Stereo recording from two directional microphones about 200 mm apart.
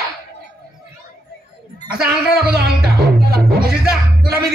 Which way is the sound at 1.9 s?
50° right (ahead or behind).